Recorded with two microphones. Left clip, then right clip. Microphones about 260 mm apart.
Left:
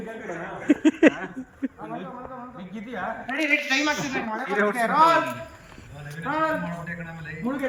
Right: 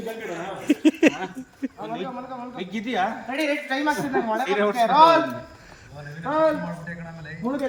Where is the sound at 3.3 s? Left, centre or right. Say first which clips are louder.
Left 5 dB; right.